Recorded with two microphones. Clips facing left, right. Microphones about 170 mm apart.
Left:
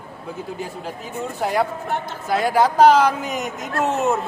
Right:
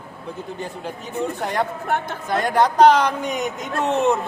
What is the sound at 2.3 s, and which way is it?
A man's voice, 5° left (ahead or behind).